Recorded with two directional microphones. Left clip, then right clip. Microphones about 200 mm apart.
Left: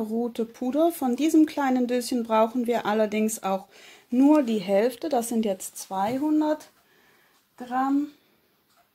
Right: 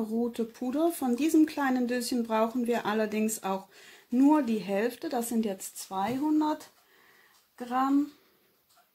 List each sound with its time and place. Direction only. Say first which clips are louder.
0.1 s speech: left 3 dB; 25° left (ahead or behind)